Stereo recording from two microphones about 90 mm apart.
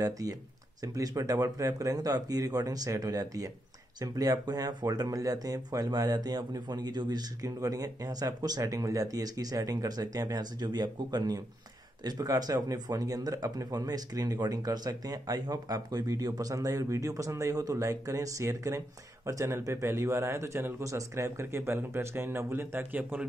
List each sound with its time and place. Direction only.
0.0 s a man's voice: 40° right (ahead or behind); by 23.2 s 20° right (ahead or behind)